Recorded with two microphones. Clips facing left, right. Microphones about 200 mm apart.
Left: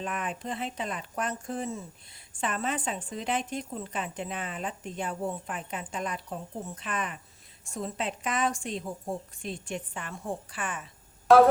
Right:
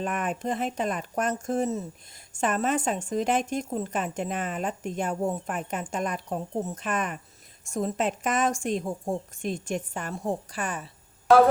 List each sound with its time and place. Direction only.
0.0 s speech: 45° right (ahead or behind)
11.3 s music: centre (ahead or behind)